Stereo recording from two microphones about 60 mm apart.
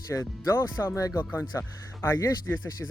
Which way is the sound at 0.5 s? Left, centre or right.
Left.